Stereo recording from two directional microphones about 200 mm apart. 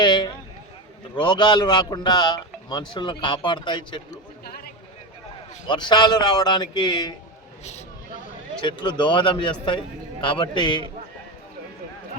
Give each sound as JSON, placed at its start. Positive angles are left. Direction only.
{"t": 0.0, "sound": "a man's voice", "side_deg": 20}
{"t": 4.4, "sound": "a sound", "side_deg": 50}
{"t": 5.6, "sound": "a man's voice", "side_deg": 20}
{"t": 7.6, "sound": "speech", "side_deg": 35}
{"t": 8.6, "sound": "a man's voice", "side_deg": 25}